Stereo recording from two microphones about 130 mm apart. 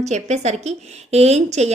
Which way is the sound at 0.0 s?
60° right (ahead or behind).